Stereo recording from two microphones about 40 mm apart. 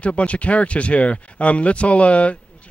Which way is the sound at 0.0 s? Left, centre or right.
Left.